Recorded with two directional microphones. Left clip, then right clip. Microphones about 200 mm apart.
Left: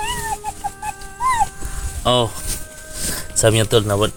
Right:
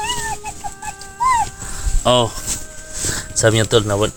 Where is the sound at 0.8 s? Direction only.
Centre (ahead or behind).